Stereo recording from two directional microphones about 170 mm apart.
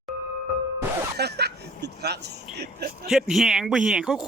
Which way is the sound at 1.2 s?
75° right (ahead or behind).